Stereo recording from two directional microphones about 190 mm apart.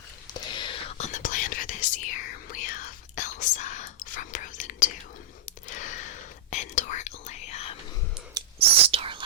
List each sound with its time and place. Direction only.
0.3 s whispering: 25° left (ahead or behind)
8.4 s whispering: 30° right (ahead or behind)